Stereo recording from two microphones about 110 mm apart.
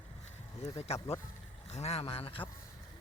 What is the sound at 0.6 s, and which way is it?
Speech, 70° left (ahead or behind).